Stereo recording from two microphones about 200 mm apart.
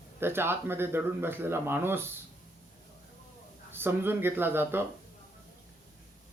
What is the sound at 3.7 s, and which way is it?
Speech, 10° right (ahead or behind).